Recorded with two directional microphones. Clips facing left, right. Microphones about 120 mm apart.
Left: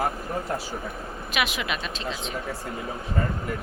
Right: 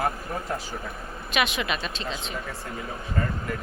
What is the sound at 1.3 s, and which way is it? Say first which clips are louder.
Speech: right 2 dB; 5° left (ahead or behind).